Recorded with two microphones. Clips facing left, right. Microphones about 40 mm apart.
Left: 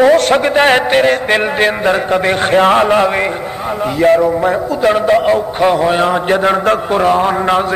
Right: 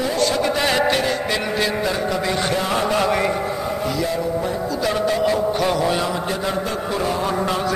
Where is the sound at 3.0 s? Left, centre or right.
Left.